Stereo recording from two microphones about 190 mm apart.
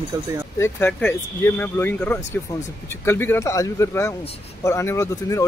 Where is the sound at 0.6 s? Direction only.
10° left (ahead or behind).